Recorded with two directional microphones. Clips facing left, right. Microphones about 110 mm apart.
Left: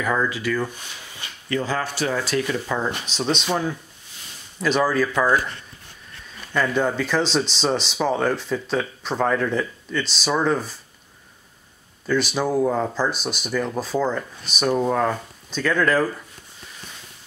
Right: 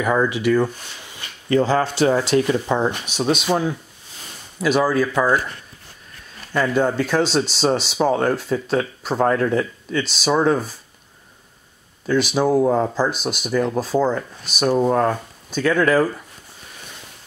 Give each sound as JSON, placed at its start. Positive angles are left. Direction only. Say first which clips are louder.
{"t": 0.0, "sound": "speech", "louder": "right 4 dB", "side_deg": -20}
{"t": 3.2, "sound": "speech", "louder": "right 4 dB", "side_deg": -10}
{"t": 6.5, "sound": "speech", "louder": "right 3 dB", "side_deg": -15}
{"t": 12.4, "sound": "speech", "louder": "right 6 dB", "side_deg": -15}